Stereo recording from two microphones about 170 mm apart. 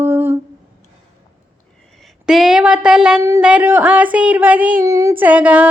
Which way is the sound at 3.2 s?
15° right (ahead or behind).